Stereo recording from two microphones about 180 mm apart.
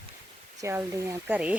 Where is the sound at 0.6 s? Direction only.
15° right (ahead or behind).